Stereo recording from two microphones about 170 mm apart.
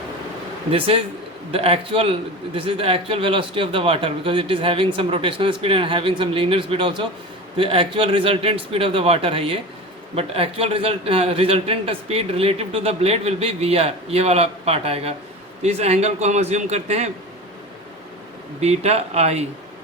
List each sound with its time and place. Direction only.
1.5 s a man's voice: 35° right (ahead or behind)
18.6 s a man's voice: 40° right (ahead or behind)